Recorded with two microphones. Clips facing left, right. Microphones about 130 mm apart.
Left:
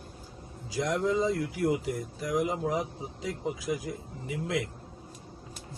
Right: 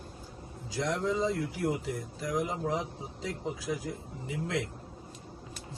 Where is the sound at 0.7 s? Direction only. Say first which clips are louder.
Left 3 dB; 10° left (ahead or behind).